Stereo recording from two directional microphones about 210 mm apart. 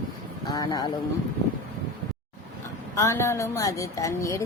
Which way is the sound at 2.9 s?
15° left (ahead or behind).